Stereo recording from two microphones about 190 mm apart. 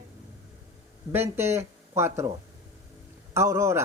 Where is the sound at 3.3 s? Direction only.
15° right (ahead or behind).